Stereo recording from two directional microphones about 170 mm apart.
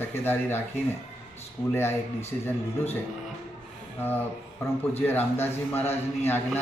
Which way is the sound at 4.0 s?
10° left (ahead or behind).